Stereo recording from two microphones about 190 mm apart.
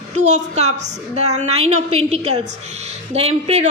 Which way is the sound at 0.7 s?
65° right (ahead or behind).